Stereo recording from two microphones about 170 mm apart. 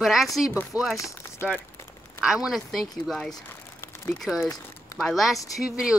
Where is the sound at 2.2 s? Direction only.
5° right (ahead or behind).